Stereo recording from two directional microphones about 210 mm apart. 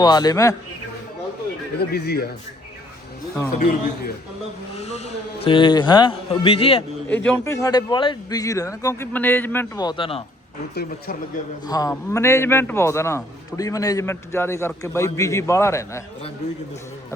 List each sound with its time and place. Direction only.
0.0 s a man's voice: 20° left (ahead or behind)
1.8 s a man's voice: 50° left (ahead or behind)
3.6 s a man's voice: 45° left (ahead or behind)
4.8 s a man's voice: 30° left (ahead or behind)
7.3 s a man's voice: 15° left (ahead or behind)
10.8 s a man's voice: 45° left (ahead or behind)
11.6 s a man's voice: 15° left (ahead or behind)